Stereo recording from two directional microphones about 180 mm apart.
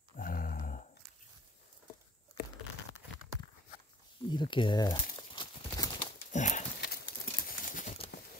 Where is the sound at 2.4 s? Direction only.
60° left (ahead or behind).